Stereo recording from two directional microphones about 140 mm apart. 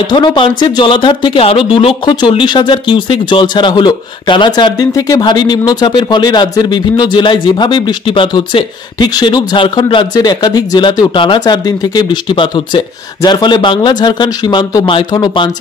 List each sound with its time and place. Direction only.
0.1 s speech: 35° left (ahead or behind)